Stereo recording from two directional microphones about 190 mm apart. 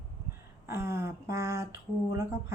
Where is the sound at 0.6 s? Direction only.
15° right (ahead or behind).